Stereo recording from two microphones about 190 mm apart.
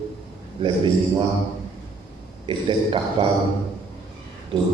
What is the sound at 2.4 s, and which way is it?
Speech, 25° right (ahead or behind).